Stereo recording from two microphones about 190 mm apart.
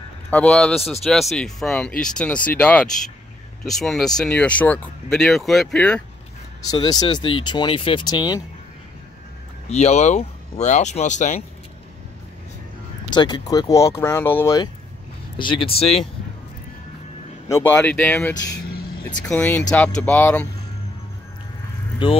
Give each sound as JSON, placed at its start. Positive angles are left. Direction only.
{"t": 0.3, "sound": "speech", "side_deg": 5}
{"t": 6.6, "sound": "speech", "side_deg": 20}
{"t": 9.7, "sound": "speech", "side_deg": 35}
{"t": 13.1, "sound": "speech", "side_deg": 25}
{"t": 17.5, "sound": "speech", "side_deg": 10}
{"t": 22.0, "sound": "speech", "side_deg": 25}